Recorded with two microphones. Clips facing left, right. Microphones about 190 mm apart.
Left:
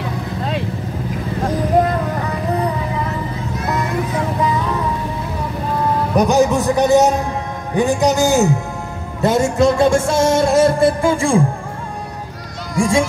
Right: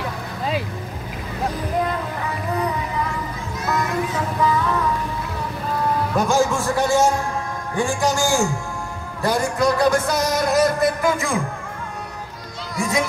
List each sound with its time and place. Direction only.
0.4 s vehicle: centre (ahead or behind)
4.4 s music: 20° left (ahead or behind)
6.1 s music: 20° left (ahead or behind)
12.7 s speech: 30° left (ahead or behind)